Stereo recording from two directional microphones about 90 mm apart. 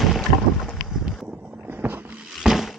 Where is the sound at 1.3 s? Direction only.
15° right (ahead or behind).